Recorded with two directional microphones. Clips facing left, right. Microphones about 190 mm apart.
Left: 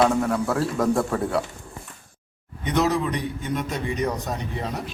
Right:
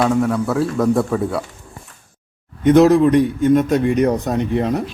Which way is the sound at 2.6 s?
55° right (ahead or behind).